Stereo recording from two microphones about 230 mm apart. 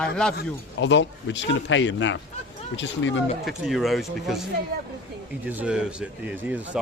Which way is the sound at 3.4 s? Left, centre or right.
Centre.